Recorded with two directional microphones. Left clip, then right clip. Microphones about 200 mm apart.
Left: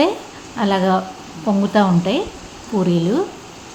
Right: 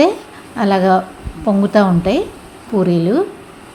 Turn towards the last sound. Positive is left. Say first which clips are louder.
# right 4 dB
turn(degrees=-20)  # may be behind; listen again after turning